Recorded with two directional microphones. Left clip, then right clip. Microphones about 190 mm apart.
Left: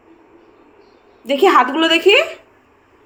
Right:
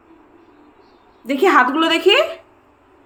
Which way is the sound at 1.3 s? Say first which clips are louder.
Left 1 dB; 15° right (ahead or behind).